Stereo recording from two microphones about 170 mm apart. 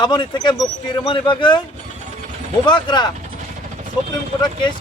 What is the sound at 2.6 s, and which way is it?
Speech, 25° left (ahead or behind).